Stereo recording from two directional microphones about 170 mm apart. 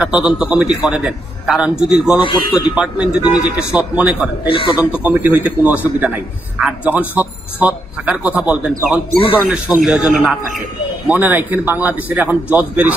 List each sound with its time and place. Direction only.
0.0 s a man's voice: 5° right (ahead or behind)
2.1 s a man's voice: 30° left (ahead or behind)
2.7 s a man's voice: 5° right (ahead or behind)
4.5 s a man's voice: 30° left (ahead or behind)
4.7 s a man's voice: 5° right (ahead or behind)